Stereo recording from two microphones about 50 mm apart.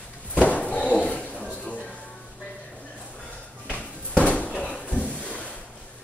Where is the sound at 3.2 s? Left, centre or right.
Left.